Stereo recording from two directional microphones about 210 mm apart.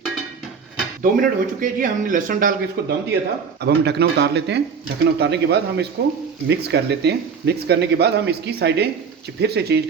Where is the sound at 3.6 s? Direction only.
50° right (ahead or behind).